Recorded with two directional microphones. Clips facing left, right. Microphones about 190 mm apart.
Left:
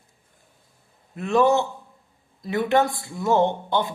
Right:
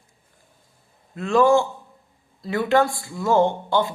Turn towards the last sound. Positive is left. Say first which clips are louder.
# right 2 dB
turn(degrees=20)  # may be behind; listen again after turning